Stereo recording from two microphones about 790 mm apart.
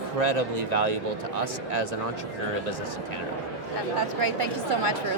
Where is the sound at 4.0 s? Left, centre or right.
Right.